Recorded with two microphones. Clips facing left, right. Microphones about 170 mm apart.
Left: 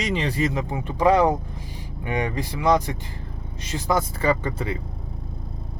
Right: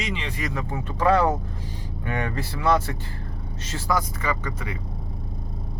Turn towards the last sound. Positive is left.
turn(degrees=30)  # may be behind; listen again after turning